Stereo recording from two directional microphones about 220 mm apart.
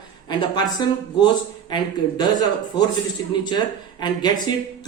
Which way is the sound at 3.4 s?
20° left (ahead or behind).